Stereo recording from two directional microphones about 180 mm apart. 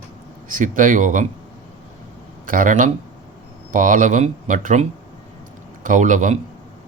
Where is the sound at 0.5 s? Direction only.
45° right (ahead or behind).